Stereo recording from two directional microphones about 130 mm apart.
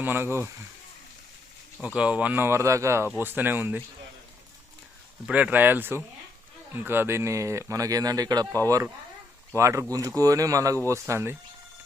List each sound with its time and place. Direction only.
0.0 s speech: 15° right (ahead or behind)
2.0 s speech: 10° right (ahead or behind)
5.2 s speech: 10° right (ahead or behind)